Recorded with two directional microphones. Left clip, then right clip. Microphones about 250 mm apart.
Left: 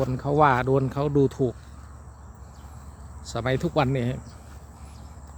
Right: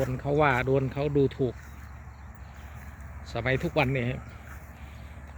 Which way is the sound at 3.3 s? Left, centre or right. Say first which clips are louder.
Left 2 dB; centre.